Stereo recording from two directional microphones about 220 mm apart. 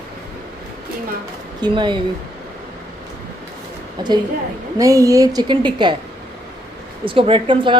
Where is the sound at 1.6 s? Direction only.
20° right (ahead or behind).